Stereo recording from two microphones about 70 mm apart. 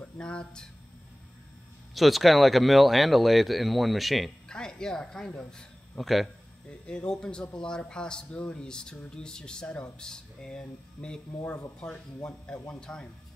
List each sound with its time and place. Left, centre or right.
0.0 s speech: centre
2.0 s speech: centre
4.5 s a man's voice: centre
5.9 s speech: centre
6.9 s a man's voice: centre